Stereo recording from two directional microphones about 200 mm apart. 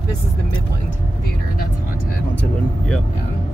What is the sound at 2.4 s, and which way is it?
Vehicle, 5° left (ahead or behind).